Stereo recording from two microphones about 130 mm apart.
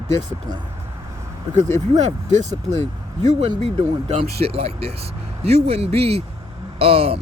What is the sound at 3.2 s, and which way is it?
Speech, 60° right (ahead or behind).